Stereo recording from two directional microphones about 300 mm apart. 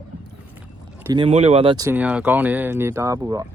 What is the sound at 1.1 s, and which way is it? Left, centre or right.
Speech, centre.